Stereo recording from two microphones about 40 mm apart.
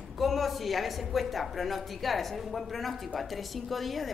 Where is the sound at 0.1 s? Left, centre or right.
Centre.